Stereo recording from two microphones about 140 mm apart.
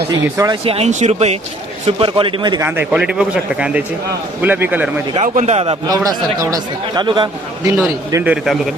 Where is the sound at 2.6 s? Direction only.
15° right (ahead or behind).